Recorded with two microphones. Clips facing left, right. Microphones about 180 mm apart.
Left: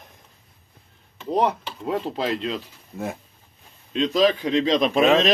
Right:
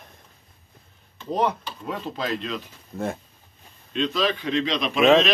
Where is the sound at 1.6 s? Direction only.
25° left (ahead or behind).